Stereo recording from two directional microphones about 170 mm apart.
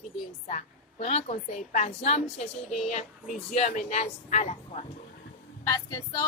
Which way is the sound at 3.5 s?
45° left (ahead or behind).